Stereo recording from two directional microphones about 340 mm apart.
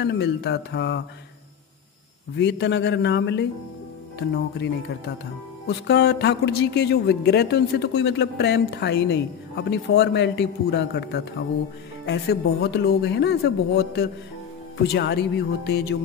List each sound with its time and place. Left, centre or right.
0.0 s speech: left
2.3 s a woman's voice: left